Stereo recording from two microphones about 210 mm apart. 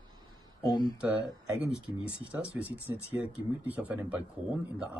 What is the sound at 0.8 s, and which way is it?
Speech, 20° left (ahead or behind).